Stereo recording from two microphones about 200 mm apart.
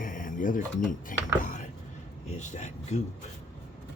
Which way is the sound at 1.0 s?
40° left (ahead or behind).